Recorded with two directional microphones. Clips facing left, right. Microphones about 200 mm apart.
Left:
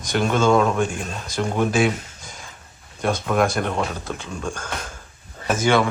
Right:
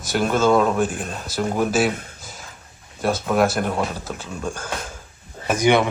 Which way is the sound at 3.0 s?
5° right (ahead or behind).